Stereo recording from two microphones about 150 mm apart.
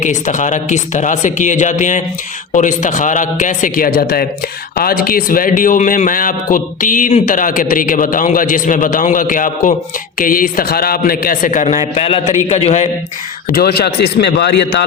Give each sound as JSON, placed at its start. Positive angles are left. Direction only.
{"t": 0.0, "sound": "a man's voice", "side_deg": 55}
{"t": 13.5, "sound": "a man's voice", "side_deg": 90}